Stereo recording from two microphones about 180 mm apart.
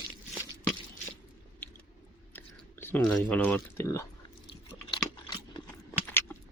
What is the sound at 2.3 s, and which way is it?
Whispering, 10° left (ahead or behind).